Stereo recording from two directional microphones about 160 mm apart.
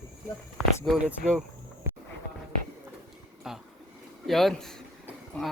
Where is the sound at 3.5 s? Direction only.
5° right (ahead or behind).